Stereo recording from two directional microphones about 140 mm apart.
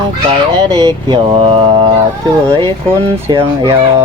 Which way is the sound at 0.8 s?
35° right (ahead or behind).